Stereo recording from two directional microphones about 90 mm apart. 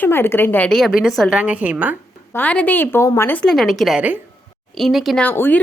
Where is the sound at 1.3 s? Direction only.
15° right (ahead or behind).